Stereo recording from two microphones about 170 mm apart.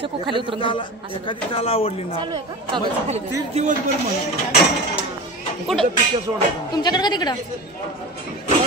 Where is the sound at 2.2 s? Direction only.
25° right (ahead or behind).